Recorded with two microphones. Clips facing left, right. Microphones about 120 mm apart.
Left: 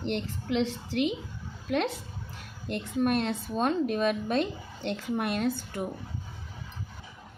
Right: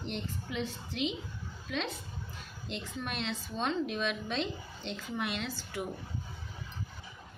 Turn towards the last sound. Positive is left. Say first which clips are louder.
# left 8 dB
turn(degrees=50)  # may be behind; listen again after turning